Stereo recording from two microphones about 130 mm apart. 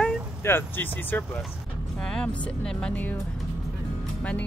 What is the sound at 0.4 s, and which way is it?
Speech, 15° left (ahead or behind).